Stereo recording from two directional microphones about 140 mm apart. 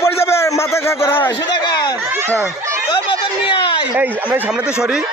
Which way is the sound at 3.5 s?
35° left (ahead or behind).